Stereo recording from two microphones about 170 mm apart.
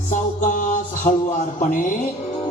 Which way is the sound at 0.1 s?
50° left (ahead or behind).